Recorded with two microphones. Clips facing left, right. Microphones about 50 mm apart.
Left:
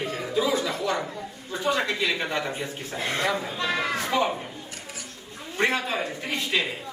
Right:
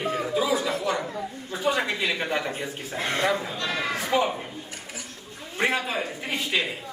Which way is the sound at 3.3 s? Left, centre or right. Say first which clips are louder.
Right 1 dB; centre.